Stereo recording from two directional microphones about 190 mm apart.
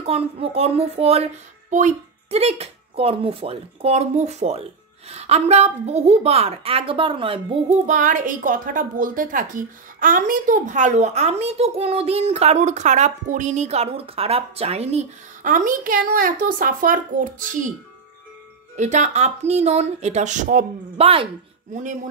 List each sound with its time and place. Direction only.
0.0 s a woman's voice: 30° right (ahead or behind)
7.8 s a woman's voice: 40° right (ahead or behind)
18.8 s a woman's voice: 40° right (ahead or behind)